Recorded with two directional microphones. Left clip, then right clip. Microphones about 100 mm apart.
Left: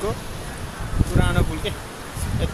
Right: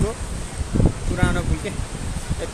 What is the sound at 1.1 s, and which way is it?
Speech, 20° right (ahead or behind).